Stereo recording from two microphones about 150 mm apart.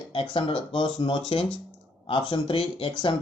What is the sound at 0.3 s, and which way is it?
Speech, 30° left (ahead or behind).